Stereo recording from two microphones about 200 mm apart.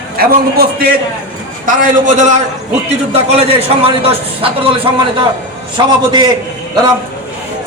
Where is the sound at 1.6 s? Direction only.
35° right (ahead or behind).